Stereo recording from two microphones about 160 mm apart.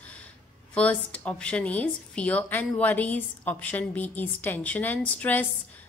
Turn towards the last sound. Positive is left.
turn(degrees=10)  # may be behind; listen again after turning